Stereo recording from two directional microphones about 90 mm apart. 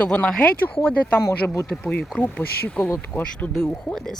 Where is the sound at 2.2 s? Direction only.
20° left (ahead or behind).